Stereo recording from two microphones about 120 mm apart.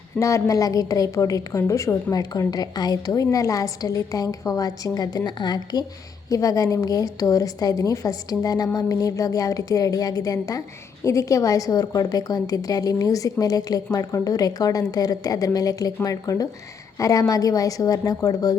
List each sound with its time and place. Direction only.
0.2 s a woman's voice: 25° left (ahead or behind)